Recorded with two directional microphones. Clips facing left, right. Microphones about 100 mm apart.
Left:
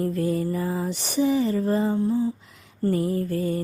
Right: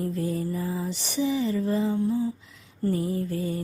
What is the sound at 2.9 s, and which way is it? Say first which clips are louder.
Mantra: left 3 dB; 55° left (ahead or behind).